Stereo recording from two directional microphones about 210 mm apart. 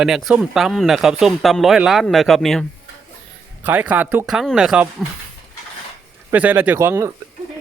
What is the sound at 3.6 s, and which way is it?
Speech, 5° right (ahead or behind).